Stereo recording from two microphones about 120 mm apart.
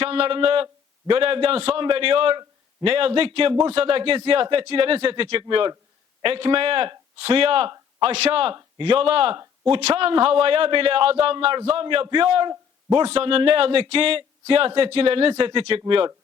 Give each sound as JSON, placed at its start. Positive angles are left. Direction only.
{"t": 0.0, "sound": "a man's voice", "side_deg": -50}